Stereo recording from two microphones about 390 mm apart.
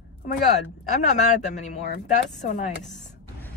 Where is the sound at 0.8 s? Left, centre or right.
Centre.